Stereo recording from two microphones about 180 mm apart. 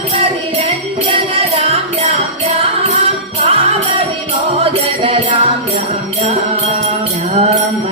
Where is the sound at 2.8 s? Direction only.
40° right (ahead or behind).